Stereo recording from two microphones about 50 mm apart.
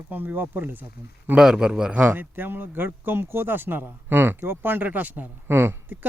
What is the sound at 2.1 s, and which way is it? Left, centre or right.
Speech, right.